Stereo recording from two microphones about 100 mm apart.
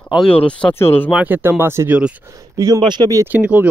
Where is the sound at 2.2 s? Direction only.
35° right (ahead or behind).